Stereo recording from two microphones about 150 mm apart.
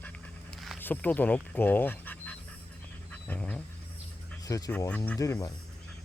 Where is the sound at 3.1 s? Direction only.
10° left (ahead or behind).